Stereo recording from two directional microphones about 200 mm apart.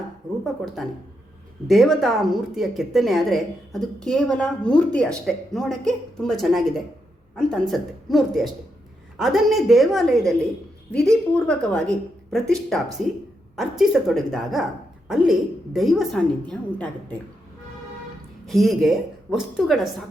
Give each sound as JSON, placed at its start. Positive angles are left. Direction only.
{"t": 1.6, "sound": "a woman's voice", "side_deg": 0}
{"t": 18.4, "sound": "a woman's voice", "side_deg": 0}